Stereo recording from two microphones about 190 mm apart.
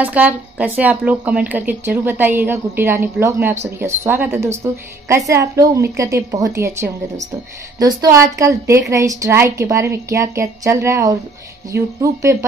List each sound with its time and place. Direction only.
0.0 s a woman's voice: 10° right (ahead or behind)